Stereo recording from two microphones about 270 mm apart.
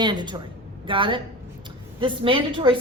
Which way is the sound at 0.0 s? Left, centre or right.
Centre.